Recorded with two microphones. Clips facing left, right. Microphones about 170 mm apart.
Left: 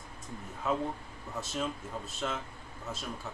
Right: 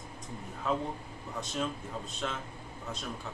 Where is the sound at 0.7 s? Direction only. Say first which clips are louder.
Left 1 dB; 5° left (ahead or behind).